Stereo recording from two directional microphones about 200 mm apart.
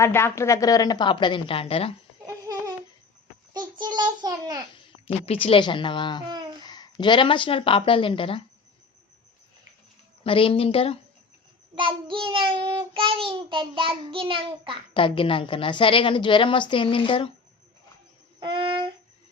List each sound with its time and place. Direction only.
0.0 s a woman's voice: 10° left (ahead or behind); by 2.0 s 30° left (ahead or behind)
2.2 s babbling: 15° right (ahead or behind)
3.5 s child singing: 20° right (ahead or behind)
5.0 s a woman's voice: 30° left (ahead or behind)
10.2 s a woman's voice: 25° left (ahead or behind)
11.7 s child singing: 25° right (ahead or behind)
14.9 s a woman's voice: 25° left (ahead or behind)
18.3 s music: 25° right (ahead or behind)